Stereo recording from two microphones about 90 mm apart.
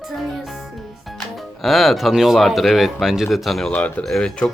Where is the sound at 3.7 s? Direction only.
15° left (ahead or behind).